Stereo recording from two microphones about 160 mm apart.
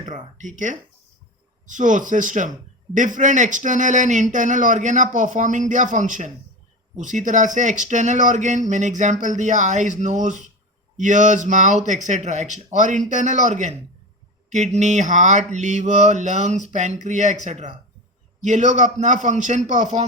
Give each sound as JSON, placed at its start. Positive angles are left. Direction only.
{"t": 0.3, "sound": "speech", "side_deg": -50}